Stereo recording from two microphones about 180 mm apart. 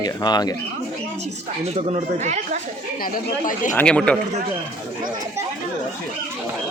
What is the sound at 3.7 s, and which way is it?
Speech, 5° left (ahead or behind).